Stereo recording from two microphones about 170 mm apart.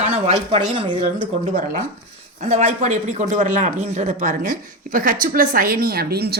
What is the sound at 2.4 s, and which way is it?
Speech, 40° right (ahead or behind).